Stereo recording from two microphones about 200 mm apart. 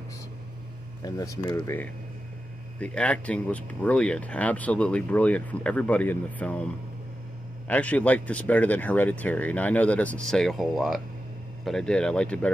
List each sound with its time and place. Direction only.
1.0 s speech: 15° left (ahead or behind)